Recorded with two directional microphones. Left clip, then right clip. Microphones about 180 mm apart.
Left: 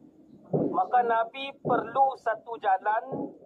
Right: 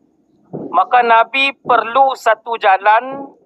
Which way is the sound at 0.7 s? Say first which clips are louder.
Right 15 dB; 50° right (ahead or behind).